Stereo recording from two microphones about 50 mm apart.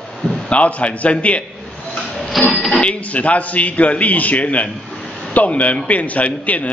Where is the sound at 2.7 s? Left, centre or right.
Left.